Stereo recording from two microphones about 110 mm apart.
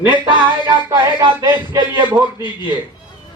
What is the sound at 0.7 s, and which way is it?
Music, 40° right (ahead or behind).